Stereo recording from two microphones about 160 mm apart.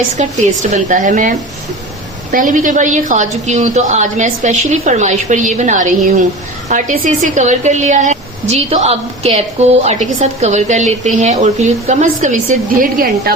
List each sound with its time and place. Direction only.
0.2 s a woman's voice: 50° right (ahead or behind)
12.8 s a woman's voice: 65° right (ahead or behind)